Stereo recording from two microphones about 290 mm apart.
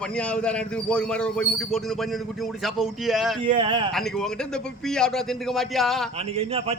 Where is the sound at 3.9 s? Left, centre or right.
Centre.